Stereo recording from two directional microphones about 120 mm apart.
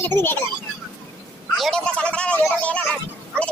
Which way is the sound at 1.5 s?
5° left (ahead or behind).